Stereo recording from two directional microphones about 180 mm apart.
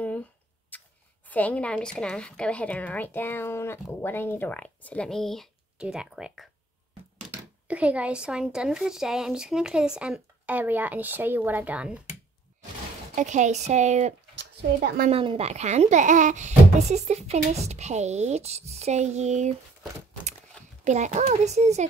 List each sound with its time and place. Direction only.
0.0 s a sound: 10° left (ahead or behind)
1.3 s a woman's voice: 10° left (ahead or behind)
7.6 s a woman's voice: 5° right (ahead or behind)
13.1 s speech: 40° right (ahead or behind)
14.4 s speech: 60° right (ahead or behind)
15.0 s speech: 35° right (ahead or behind)
20.8 s speech: 40° right (ahead or behind)